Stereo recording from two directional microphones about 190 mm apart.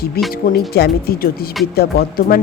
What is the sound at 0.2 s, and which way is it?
Speech, 55° left (ahead or behind).